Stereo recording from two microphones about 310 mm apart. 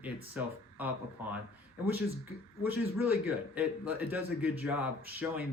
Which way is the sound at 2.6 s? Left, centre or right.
Centre.